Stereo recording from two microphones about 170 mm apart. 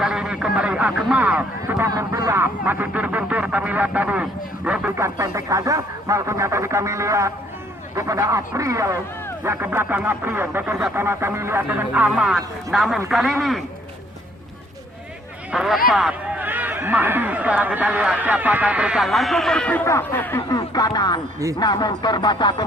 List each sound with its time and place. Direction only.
0.0 s a man's voice: 5° right (ahead or behind)
15.5 s a man's voice: centre (ahead or behind)
20.5 s speech: 25° left (ahead or behind)